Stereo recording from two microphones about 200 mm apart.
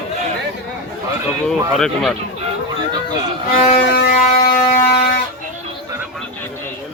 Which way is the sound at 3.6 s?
50° left (ahead or behind).